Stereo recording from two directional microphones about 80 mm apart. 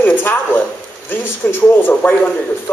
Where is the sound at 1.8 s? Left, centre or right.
Left.